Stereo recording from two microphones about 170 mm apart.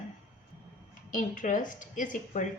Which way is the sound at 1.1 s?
50° left (ahead or behind).